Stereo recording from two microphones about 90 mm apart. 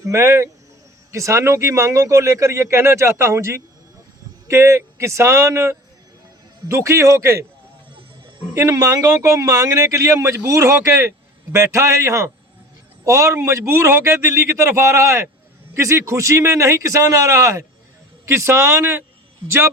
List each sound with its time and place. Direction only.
0.0 s speech: 35° right (ahead or behind)
8.5 s a man's voice: 35° right (ahead or behind)